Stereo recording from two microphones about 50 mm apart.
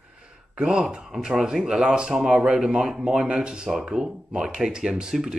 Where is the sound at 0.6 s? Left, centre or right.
Right.